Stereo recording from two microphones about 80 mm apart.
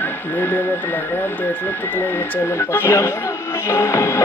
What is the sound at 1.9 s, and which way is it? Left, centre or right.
Speech, left.